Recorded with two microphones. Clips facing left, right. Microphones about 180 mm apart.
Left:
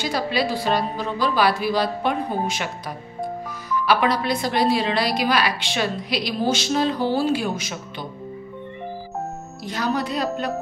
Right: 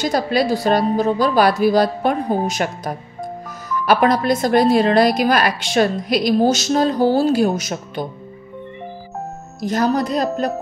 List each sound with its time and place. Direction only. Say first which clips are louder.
0.0 s speech: right 5 dB; 45° right (ahead or behind)
9.6 s speech: right 7 dB; 45° right (ahead or behind)